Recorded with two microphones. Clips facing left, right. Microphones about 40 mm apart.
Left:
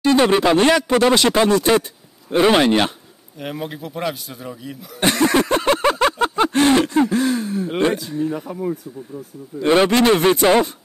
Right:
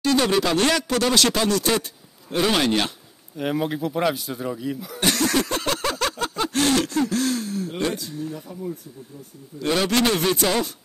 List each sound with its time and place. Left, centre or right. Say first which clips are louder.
0.0 s speech: left 5 dB; left
3.3 s speech: right 4 dB; centre
5.0 s a sound: left 5 dB; left
7.7 s speech: left 10 dB; left
9.6 s speech: left 6 dB; left